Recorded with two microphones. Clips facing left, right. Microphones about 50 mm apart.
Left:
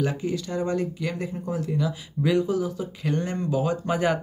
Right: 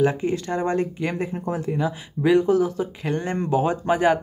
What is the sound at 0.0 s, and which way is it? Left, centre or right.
Speech, right.